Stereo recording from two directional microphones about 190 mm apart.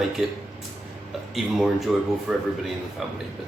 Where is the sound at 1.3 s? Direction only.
Centre (ahead or behind).